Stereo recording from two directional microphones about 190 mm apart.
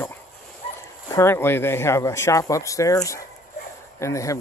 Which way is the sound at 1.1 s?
15° left (ahead or behind).